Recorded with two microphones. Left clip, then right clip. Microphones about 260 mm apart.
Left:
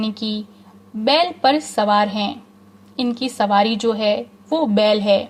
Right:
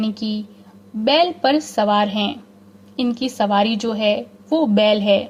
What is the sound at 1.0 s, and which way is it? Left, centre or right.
A woman's voice, left.